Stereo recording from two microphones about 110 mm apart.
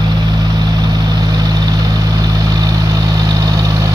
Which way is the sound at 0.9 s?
40° right (ahead or behind).